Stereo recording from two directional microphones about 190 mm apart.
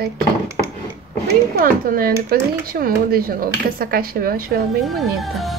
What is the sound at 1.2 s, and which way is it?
Speech, 50° right (ahead or behind).